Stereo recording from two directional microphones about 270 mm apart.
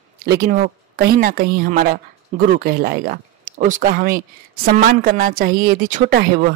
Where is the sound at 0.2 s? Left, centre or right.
Right.